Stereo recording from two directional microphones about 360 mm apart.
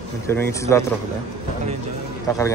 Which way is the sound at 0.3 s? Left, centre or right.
Centre.